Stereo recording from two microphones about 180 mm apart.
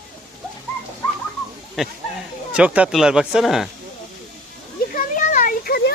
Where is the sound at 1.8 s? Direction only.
Centre (ahead or behind).